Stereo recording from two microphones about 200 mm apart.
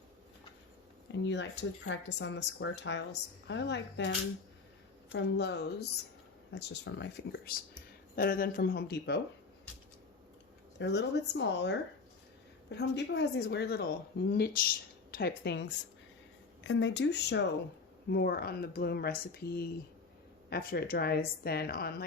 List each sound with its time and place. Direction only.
1.1 s speech: 60° left (ahead or behind)
5.1 s speech: 60° left (ahead or behind)
8.1 s speech: 45° left (ahead or behind)
10.8 s a woman's voice: 60° left (ahead or behind)